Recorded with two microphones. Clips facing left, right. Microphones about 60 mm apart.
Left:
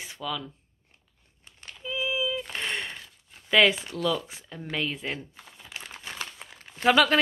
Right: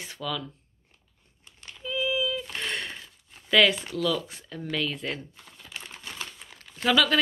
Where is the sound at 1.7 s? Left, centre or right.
Centre.